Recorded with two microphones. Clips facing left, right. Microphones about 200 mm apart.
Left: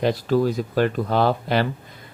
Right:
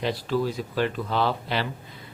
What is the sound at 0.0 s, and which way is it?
Speech, 45° left (ahead or behind).